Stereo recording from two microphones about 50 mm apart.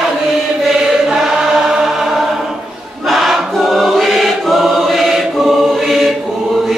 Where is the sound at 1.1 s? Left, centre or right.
Centre.